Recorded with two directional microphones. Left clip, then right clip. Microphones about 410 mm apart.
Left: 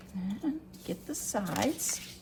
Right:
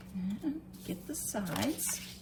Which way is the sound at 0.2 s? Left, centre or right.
Centre.